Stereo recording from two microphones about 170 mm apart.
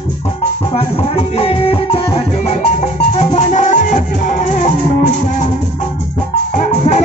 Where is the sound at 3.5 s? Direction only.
45° left (ahead or behind).